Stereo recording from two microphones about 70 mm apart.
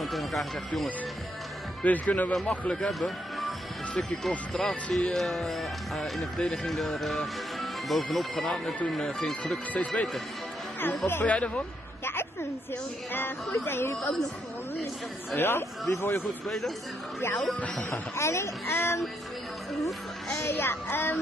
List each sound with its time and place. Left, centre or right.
0.0 s music: centre
1.8 s speech: left
2.9 s music: centre
4.6 s speech: centre
6.4 s speech: centre
6.7 s speech: centre
9.8 s speech: left
11.1 s speech: left
12.0 s a sound: left
13.1 s speech: left
15.3 s speech: left
16.4 s speech: centre
17.2 s speech: left
20.4 s speech: left